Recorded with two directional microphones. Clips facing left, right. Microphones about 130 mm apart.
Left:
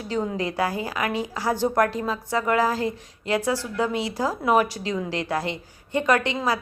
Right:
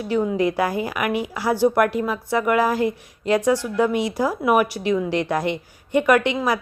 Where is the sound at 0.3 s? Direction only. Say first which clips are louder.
Right 5 dB; 15° right (ahead or behind).